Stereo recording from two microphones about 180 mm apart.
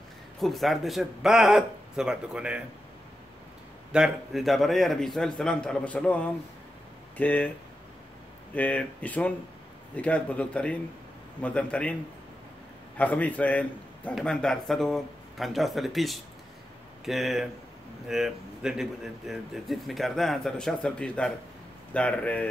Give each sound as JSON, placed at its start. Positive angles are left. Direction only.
{"t": 0.4, "sound": "a man's voice", "side_deg": 0}
{"t": 3.9, "sound": "a man's voice", "side_deg": 0}
{"t": 8.5, "sound": "a man's voice", "side_deg": 10}
{"t": 12.9, "sound": "a man's voice", "side_deg": 10}